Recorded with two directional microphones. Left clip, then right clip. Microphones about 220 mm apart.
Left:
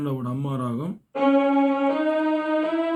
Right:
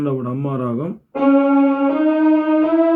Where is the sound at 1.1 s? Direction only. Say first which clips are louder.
Right 5 dB; 5° left (ahead or behind).